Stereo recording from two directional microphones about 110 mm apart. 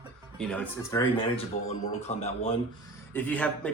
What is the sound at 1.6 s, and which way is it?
Speech, 85° left.